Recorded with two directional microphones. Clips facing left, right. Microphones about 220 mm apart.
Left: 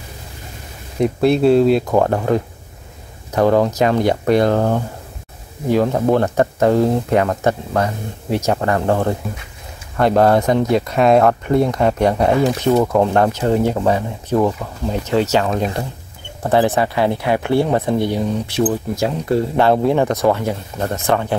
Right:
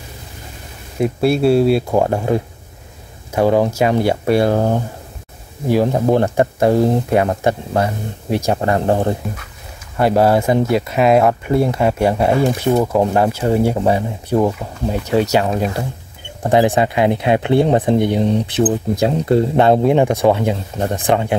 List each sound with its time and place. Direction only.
1.0 s speech: 5° right (ahead or behind)
8.5 s speech: 25° right (ahead or behind)
9.9 s speech: 5° right (ahead or behind)